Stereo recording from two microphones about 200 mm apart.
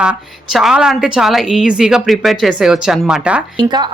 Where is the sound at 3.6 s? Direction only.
20° right (ahead or behind).